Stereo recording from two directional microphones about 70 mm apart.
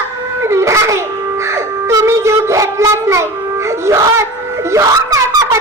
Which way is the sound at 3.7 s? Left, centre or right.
Right.